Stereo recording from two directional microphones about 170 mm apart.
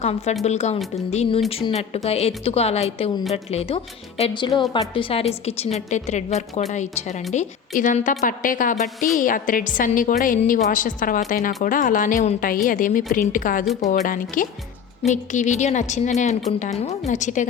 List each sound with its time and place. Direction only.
0.0 s a woman's voice: 40° left (ahead or behind)